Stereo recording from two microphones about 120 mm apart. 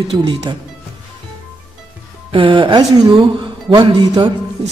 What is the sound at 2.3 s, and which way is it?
Speech, 45° right (ahead or behind).